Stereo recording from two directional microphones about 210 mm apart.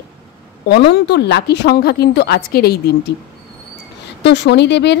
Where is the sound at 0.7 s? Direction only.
55° left (ahead or behind).